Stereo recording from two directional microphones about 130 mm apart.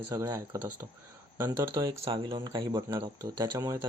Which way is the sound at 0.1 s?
30° right (ahead or behind).